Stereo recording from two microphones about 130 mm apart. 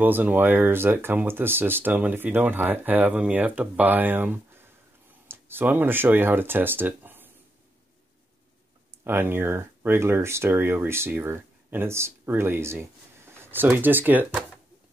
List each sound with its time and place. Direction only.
0.0 s speech: 15° right (ahead or behind)
9.0 s speech: 15° right (ahead or behind)